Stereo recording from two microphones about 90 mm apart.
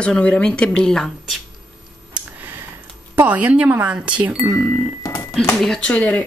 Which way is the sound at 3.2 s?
15° right (ahead or behind).